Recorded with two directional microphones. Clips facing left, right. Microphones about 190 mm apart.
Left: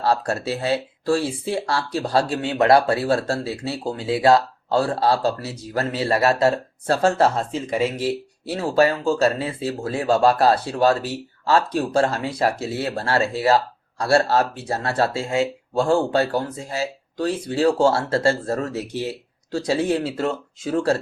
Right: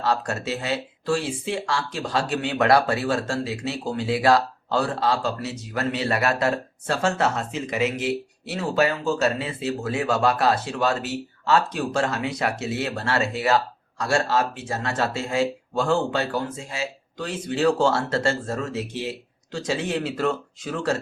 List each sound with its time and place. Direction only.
0.0 s speech: 35° left (ahead or behind)